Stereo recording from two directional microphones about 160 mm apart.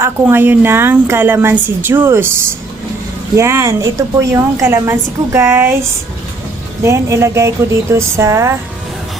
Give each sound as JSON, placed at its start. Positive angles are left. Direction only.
{"t": 0.0, "sound": "a woman's voice", "side_deg": -15}
{"t": 3.3, "sound": "a woman's voice", "side_deg": -15}
{"t": 6.8, "sound": "a woman's voice", "side_deg": -20}